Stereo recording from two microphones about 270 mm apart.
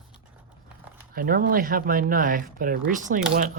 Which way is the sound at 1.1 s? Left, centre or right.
Right.